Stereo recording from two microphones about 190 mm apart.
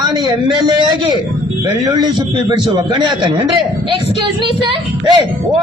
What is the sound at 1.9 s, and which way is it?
A man's voice, 20° right (ahead or behind).